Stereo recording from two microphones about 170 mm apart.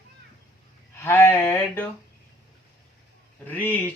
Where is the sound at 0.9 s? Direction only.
15° left (ahead or behind).